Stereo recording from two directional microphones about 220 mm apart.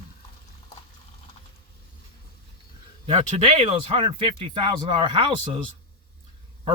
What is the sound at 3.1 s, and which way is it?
Speech, 30° right (ahead or behind).